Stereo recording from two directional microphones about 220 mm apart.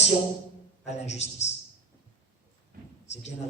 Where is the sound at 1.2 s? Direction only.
30° left (ahead or behind).